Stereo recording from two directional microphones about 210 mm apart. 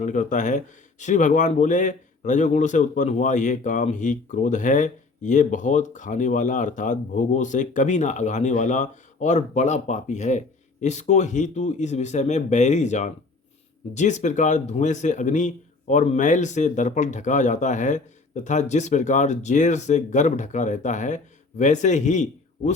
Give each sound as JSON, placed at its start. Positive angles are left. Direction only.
{"t": 0.0, "sound": "speech", "side_deg": 35}